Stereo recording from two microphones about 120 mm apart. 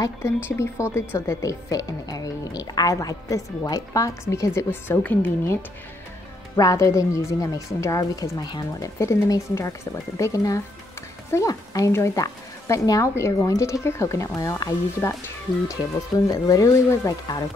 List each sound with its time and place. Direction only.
0.5 s a woman's voice: 20° left (ahead or behind)